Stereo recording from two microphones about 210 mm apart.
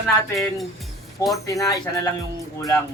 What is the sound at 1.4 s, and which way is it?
Speech, 15° left (ahead or behind).